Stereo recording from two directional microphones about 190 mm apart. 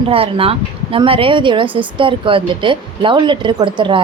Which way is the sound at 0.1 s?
30° right (ahead or behind).